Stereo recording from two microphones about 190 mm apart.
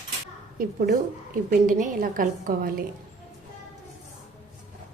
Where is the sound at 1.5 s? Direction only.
45° right (ahead or behind).